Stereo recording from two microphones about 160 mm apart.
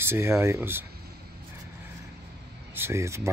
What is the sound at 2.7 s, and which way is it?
Speech, 15° right (ahead or behind).